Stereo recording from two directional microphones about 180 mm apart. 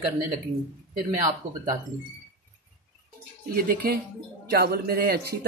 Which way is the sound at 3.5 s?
60° right (ahead or behind).